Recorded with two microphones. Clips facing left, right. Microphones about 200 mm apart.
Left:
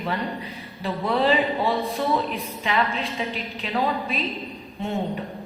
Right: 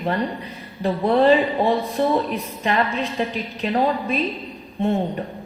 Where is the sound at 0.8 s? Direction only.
45° right (ahead or behind).